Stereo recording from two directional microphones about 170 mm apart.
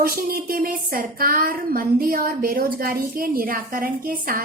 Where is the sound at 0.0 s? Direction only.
55° right (ahead or behind).